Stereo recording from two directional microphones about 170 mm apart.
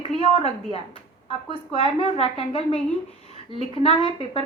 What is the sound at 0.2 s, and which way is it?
A woman's voice, 35° left (ahead or behind).